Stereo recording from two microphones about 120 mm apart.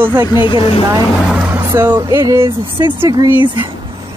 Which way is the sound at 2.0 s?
25° right (ahead or behind).